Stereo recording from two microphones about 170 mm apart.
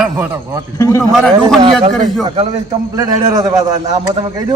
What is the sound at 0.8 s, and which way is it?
Speech, 15° left (ahead or behind).